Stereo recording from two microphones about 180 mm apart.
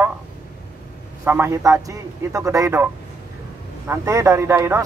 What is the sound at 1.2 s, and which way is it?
Speech, 15° right (ahead or behind).